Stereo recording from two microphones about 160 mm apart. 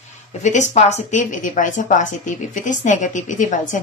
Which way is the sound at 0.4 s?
45° left (ahead or behind).